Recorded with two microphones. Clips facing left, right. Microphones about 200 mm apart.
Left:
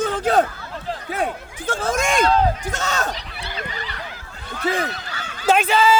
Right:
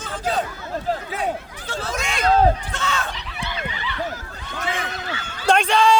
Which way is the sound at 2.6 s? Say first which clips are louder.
Left 2 dB; 40° left (ahead or behind).